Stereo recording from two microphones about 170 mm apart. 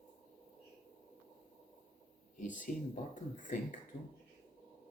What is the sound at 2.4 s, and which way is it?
Speech, 50° left (ahead or behind).